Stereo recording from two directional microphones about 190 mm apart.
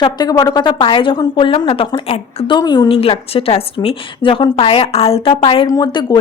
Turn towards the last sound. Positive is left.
turn(degrees=20)  # may be behind; listen again after turning